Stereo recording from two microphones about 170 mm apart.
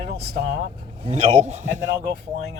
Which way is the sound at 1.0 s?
40° right (ahead or behind).